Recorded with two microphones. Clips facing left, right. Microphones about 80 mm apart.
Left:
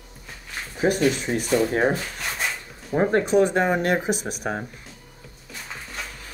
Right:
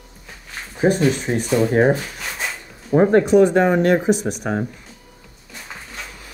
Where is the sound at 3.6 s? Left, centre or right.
Centre.